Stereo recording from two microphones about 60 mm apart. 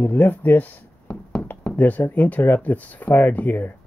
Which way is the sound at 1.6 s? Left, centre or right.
Left.